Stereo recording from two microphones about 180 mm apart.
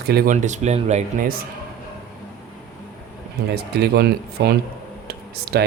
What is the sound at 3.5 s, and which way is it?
Speech, 65° right (ahead or behind).